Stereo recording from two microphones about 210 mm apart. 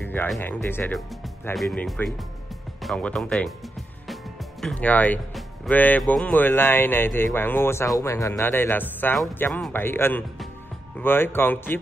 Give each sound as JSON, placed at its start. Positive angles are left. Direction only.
{"t": 0.0, "sound": "a man's voice", "side_deg": 10}